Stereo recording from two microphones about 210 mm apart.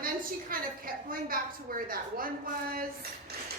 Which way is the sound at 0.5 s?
45° right (ahead or behind).